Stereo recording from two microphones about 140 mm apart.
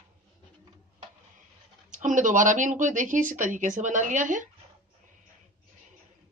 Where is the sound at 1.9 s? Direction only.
65° right (ahead or behind).